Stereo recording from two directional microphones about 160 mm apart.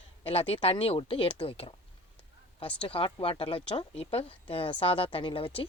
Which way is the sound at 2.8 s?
35° left (ahead or behind).